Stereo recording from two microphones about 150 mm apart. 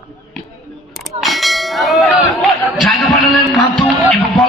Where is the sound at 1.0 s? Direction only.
Centre (ahead or behind).